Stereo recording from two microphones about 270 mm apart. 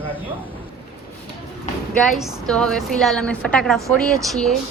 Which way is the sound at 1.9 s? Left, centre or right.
Centre.